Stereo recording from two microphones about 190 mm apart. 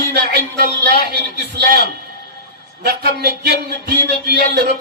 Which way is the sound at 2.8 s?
55° right (ahead or behind).